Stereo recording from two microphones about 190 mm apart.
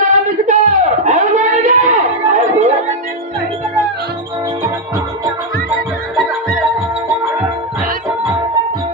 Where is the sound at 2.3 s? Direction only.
40° right (ahead or behind).